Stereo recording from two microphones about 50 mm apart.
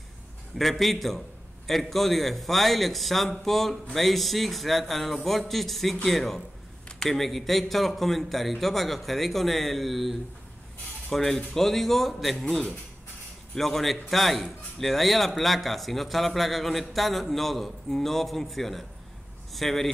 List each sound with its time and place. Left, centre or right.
0.6 s speech: centre